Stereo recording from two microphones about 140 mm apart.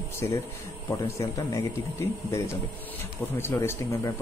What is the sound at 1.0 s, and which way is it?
Speech, 20° left (ahead or behind).